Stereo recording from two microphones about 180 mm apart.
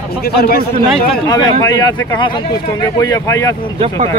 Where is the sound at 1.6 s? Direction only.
20° left (ahead or behind).